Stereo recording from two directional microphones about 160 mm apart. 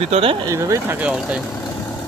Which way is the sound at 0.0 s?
40° right (ahead or behind).